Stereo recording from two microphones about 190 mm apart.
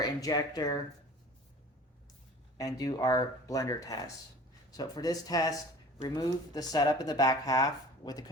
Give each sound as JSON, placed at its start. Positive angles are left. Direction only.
{"t": 0.0, "sound": "speech", "side_deg": 20}
{"t": 2.6, "sound": "speech", "side_deg": 20}